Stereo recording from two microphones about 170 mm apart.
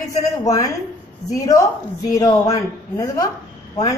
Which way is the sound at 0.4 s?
20° left (ahead or behind).